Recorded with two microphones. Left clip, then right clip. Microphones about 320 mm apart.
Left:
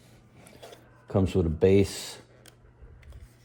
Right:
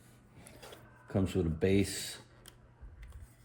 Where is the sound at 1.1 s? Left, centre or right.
Centre.